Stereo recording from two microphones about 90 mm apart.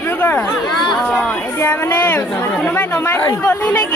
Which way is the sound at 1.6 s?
30° left (ahead or behind).